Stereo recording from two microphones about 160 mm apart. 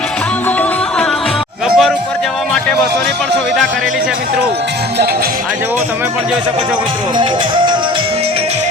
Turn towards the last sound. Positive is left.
turn(degrees=-30)  # may be behind; listen again after turning